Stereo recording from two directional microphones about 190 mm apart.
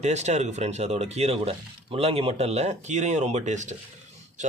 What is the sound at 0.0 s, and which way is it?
Speech, 35° right (ahead or behind).